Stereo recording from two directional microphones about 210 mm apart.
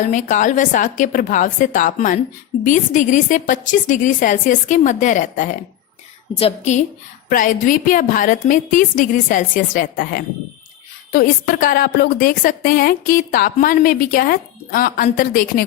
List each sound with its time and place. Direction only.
0.0 s a woman's voice: 35° left (ahead or behind)